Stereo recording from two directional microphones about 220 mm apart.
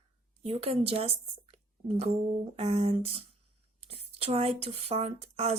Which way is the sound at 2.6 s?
30° right (ahead or behind).